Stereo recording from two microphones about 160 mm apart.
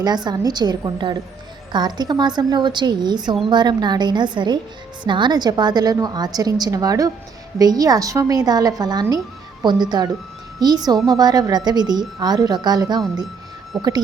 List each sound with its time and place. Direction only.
0.3 s a woman's voice: 25° right (ahead or behind)